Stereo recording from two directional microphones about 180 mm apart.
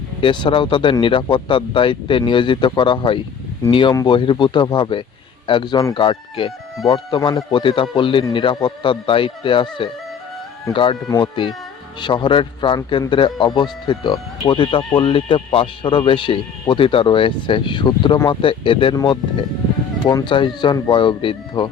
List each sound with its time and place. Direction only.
0.2 s speech: 25° left (ahead or behind)